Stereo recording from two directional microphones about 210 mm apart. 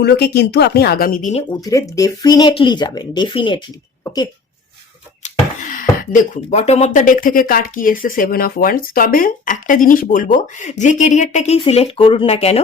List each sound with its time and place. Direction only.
0.0 s speech: 50° left (ahead or behind); by 1.5 s 35° left (ahead or behind)
1.5 s speech: 15° left (ahead or behind)
4.0 s cough: 20° left (ahead or behind)
5.7 s speech: 35° left (ahead or behind)